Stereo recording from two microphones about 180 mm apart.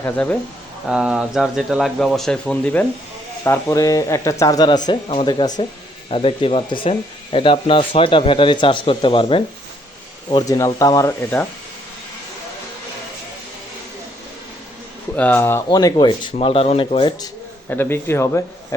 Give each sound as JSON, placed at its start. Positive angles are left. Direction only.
{"t": 0.0, "sound": "speech", "side_deg": 10}
{"t": 0.9, "sound": "speech", "side_deg": -5}
{"t": 3.4, "sound": "speech", "side_deg": 15}
{"t": 15.1, "sound": "speech", "side_deg": 10}
{"t": 17.7, "sound": "speech", "side_deg": 10}